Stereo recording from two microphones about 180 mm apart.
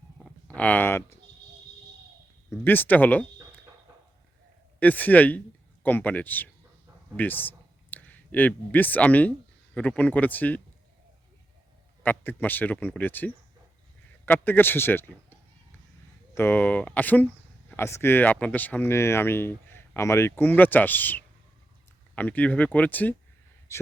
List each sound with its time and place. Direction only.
0.2 s a sound: 5° left (ahead or behind)
2.5 s speech: 10° left (ahead or behind)
4.8 s speech: 10° left (ahead or behind)
12.0 s speech: 10° left (ahead or behind)